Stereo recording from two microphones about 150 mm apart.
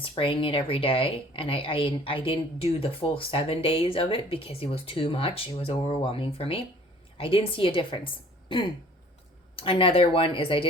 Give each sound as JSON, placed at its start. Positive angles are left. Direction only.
{"t": 0.0, "sound": "speech", "side_deg": 35}